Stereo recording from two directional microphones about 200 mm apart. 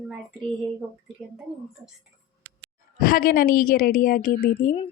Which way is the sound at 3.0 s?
45° left (ahead or behind).